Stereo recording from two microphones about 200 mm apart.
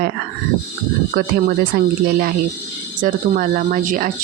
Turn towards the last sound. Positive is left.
turn(degrees=-45)  # may be behind; listen again after turning